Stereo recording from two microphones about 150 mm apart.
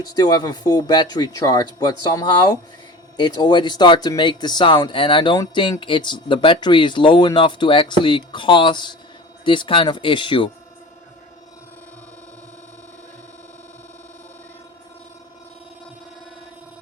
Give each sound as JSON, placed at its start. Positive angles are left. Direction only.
{"t": 0.0, "sound": "speech", "side_deg": 25}